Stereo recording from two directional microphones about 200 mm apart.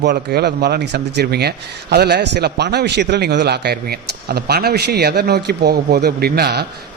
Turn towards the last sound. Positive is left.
turn(degrees=-55)  # may be behind; listen again after turning